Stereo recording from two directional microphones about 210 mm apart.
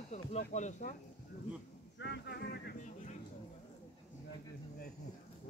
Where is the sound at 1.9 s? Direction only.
55° left (ahead or behind).